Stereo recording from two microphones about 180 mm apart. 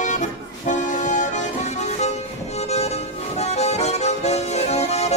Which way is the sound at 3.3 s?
35° left (ahead or behind).